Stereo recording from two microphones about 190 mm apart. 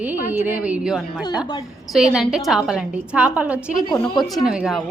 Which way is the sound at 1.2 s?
20° left (ahead or behind).